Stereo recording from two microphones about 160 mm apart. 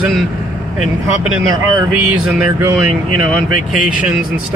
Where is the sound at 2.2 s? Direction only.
10° right (ahead or behind).